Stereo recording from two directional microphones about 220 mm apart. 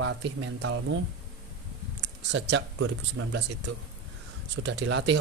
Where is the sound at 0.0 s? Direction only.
55° right (ahead or behind).